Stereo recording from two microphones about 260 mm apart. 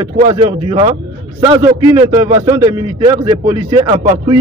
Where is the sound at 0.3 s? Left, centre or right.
Centre.